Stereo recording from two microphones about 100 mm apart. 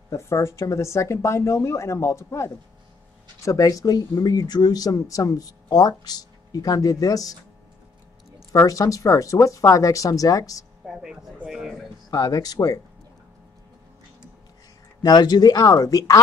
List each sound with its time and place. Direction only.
0.1 s a woman's voice: 30° left (ahead or behind)
8.5 s speech: 30° left (ahead or behind)
10.9 s a sound: 5° right (ahead or behind)
12.1 s speech: 40° left (ahead or behind)
15.0 s speech: 40° left (ahead or behind)